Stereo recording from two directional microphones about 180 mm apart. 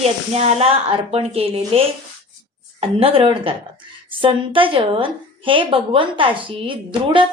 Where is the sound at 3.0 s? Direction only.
30° right (ahead or behind).